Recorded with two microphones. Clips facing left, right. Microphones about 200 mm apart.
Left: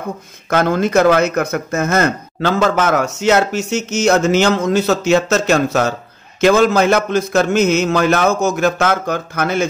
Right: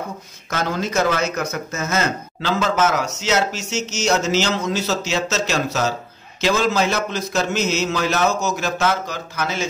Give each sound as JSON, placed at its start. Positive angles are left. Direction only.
{"t": 0.5, "sound": "a man's voice", "side_deg": 55}